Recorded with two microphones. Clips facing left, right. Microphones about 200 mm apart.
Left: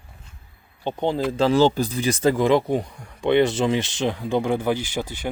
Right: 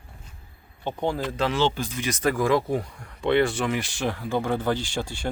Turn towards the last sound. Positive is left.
turn(degrees=15)  # may be behind; listen again after turning